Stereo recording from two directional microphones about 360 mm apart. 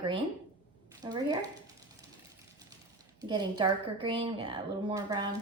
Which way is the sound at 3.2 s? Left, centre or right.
Centre.